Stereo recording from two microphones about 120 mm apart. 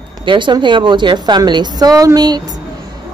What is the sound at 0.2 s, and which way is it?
A woman's voice, 40° right (ahead or behind).